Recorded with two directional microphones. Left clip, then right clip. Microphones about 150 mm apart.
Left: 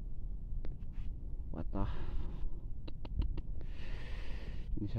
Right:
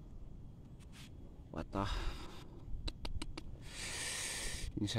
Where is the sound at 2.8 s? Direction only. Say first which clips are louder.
Right 4 dB; 15° right (ahead or behind).